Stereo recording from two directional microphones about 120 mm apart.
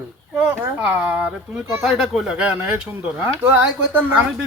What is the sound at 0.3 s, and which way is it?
Speech, 10° right (ahead or behind).